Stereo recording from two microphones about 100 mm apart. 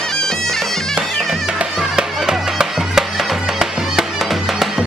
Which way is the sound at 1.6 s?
10° right (ahead or behind).